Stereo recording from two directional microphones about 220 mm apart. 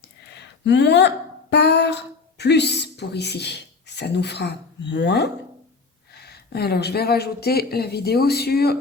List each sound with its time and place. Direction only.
0.6 s speech: 50° left (ahead or behind)